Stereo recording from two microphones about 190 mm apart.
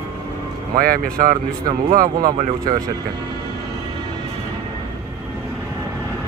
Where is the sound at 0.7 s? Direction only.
50° right (ahead or behind).